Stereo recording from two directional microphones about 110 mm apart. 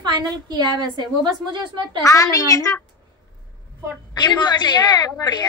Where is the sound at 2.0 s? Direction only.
30° left (ahead or behind).